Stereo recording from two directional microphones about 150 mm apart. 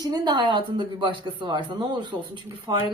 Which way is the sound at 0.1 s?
30° right (ahead or behind).